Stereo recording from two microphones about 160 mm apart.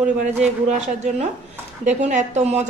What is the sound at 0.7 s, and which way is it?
A woman's voice, 45° right (ahead or behind).